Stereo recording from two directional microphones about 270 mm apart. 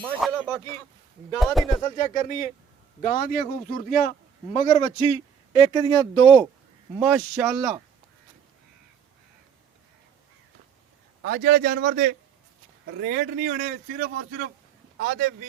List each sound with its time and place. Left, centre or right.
0.0 s speech: centre
1.8 s a man's voice: left
4.5 s speech: left
7.0 s speech: centre
11.2 s a man's voice: right